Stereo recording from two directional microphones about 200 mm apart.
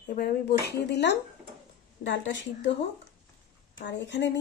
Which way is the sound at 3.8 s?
60° left (ahead or behind).